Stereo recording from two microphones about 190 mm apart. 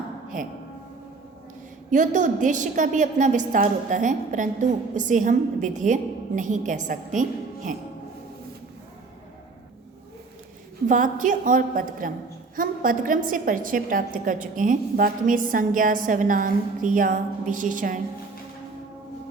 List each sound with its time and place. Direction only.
0.3 s speech: 45° right (ahead or behind)
1.9 s a woman's voice: 40° right (ahead or behind)
10.8 s a woman's voice: 45° right (ahead or behind)